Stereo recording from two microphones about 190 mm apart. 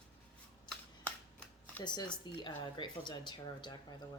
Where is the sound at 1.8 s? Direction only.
20° left (ahead or behind).